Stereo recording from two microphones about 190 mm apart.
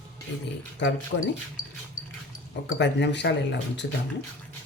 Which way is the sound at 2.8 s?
65° left (ahead or behind).